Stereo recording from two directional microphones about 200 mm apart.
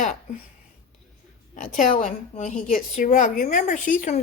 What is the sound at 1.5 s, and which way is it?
A woman's voice, 40° left (ahead or behind).